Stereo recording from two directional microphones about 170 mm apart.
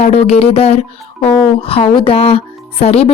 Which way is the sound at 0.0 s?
40° left (ahead or behind).